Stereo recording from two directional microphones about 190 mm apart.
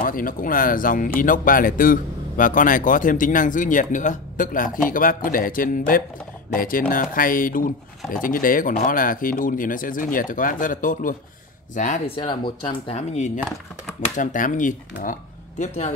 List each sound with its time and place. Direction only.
0.0 s speech: 45° left (ahead or behind)
12.2 s speech: 25° left (ahead or behind)